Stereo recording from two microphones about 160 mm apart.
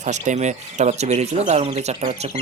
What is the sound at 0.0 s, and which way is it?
Speech, 45° right (ahead or behind).